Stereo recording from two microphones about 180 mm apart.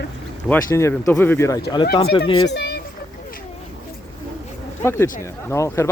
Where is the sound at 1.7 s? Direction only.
25° left (ahead or behind).